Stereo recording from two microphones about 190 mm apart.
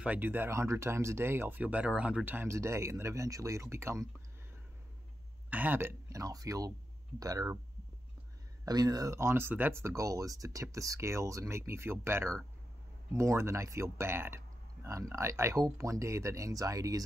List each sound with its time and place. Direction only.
0.0 s speech: 10° right (ahead or behind)
5.5 s speech: 10° right (ahead or behind)
8.6 s speech: 20° right (ahead or behind)